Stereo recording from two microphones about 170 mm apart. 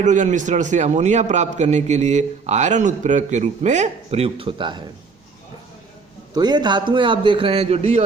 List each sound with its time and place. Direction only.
0.0 s a man's voice: 45° right (ahead or behind); by 4.8 s 30° right (ahead or behind)
6.3 s a man's voice: 25° right (ahead or behind)